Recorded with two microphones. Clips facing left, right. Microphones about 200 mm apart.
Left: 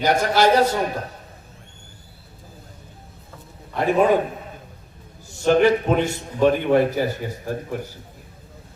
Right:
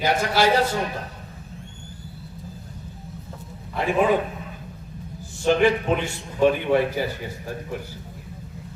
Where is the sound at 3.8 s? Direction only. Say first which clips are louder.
Left 3 dB; 40° left (ahead or behind).